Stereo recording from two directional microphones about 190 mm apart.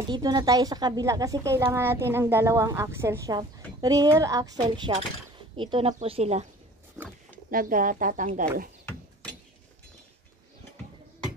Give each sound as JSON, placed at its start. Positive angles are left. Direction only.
{"t": 0.1, "sound": "speech", "side_deg": -20}
{"t": 7.0, "sound": "a sound", "side_deg": 0}
{"t": 7.5, "sound": "speech", "side_deg": -45}